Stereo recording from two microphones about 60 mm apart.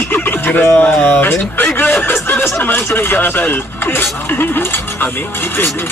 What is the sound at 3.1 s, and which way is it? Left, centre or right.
Speech, left.